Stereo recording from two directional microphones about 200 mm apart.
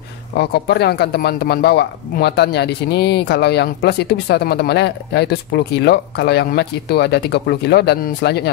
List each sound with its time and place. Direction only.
0.4 s speech: 55° left (ahead or behind)